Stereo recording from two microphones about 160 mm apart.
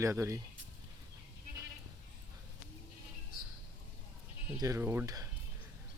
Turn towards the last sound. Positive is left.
turn(degrees=-20)  # may be behind; listen again after turning